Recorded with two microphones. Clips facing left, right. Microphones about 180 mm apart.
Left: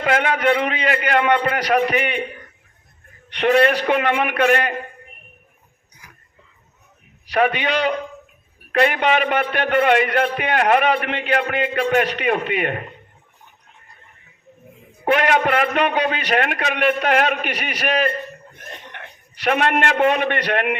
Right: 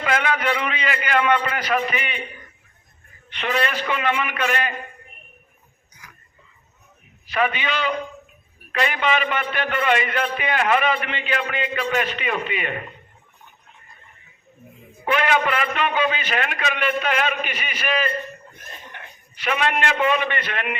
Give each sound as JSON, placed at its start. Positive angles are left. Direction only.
{"t": 0.0, "sound": "a man's voice", "side_deg": 50}
{"t": 3.3, "sound": "a man's voice", "side_deg": 60}
{"t": 7.3, "sound": "a man's voice", "side_deg": 65}
{"t": 15.0, "sound": "a man's voice", "side_deg": 60}